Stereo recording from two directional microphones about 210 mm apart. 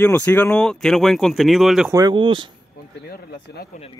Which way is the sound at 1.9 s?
20° right (ahead or behind).